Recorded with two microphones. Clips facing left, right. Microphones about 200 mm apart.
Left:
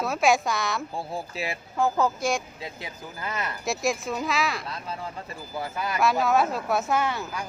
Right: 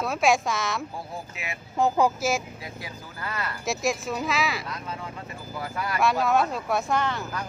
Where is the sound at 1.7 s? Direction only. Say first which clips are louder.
Right 2 dB; 20° right (ahead or behind).